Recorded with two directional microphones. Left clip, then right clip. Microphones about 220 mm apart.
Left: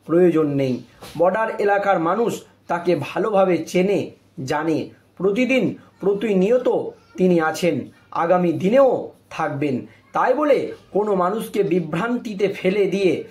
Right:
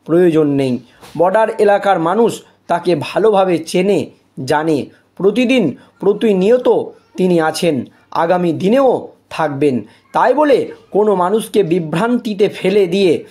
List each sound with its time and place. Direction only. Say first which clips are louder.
0.0 s speech: right 5 dB; 45° right (ahead or behind)